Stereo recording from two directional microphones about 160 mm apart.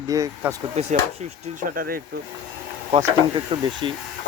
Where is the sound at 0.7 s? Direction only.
45° right (ahead or behind).